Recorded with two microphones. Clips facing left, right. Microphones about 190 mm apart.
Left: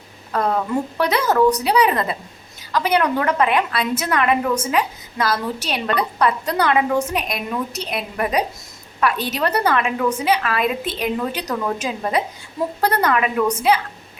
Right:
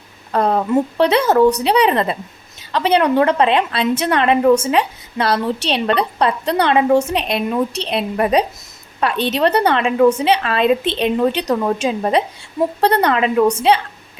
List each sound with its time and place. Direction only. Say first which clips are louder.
0.3 s a woman's voice: right 4 dB; 30° right (ahead or behind)